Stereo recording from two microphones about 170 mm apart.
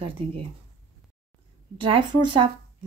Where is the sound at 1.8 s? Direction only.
30° right (ahead or behind).